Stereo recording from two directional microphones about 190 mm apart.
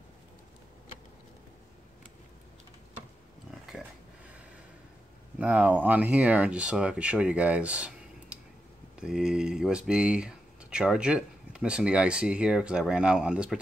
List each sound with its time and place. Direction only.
5.4 s speech: 10° right (ahead or behind)